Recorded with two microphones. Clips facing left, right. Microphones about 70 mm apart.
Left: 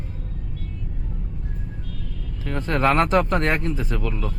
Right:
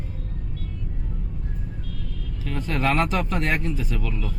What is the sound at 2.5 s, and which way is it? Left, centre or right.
Speech, left.